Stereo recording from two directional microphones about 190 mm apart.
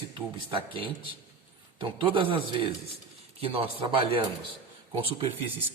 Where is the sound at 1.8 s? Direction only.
25° right (ahead or behind).